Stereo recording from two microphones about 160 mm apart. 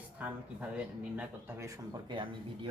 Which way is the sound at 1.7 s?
30° right (ahead or behind).